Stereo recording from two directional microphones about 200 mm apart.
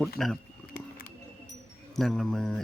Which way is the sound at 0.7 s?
45° left (ahead or behind).